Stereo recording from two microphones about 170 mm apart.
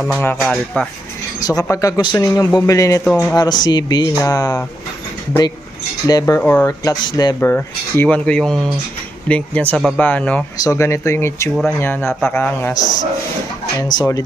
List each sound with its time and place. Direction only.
0.0 s speech: 5° left (ahead or behind)
1.4 s speech: 20° left (ahead or behind)
3.0 s speech: 5° left (ahead or behind)
3.3 s speech: 25° left (ahead or behind)
6.0 s speech: 20° left (ahead or behind)
6.8 s speech: 25° left (ahead or behind)
7.3 s speech: 10° left (ahead or behind)
13.7 s speech: 25° left (ahead or behind)